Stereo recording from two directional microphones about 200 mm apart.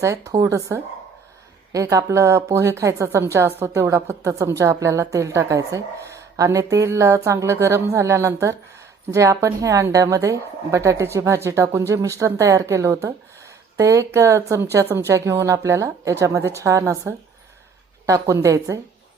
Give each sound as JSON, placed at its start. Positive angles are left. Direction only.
{"t": 0.0, "sound": "a woman's voice", "side_deg": -15}